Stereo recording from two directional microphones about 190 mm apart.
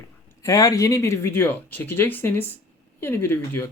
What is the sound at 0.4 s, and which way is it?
Speech, 15° left (ahead or behind).